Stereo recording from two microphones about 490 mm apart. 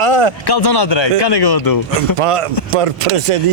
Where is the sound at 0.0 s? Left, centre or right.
Right.